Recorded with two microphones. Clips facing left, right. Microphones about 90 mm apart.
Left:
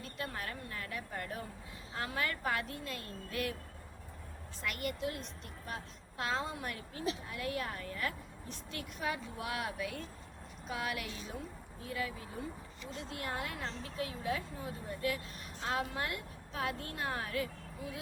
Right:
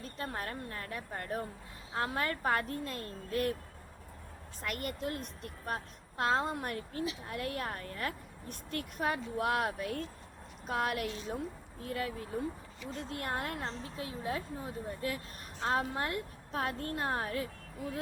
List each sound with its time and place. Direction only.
0.0 s a woman's voice: 40° right (ahead or behind)
4.6 s a woman's voice: 45° right (ahead or behind)
13.7 s a woman's voice: 30° right (ahead or behind)
17.7 s speech: 45° right (ahead or behind)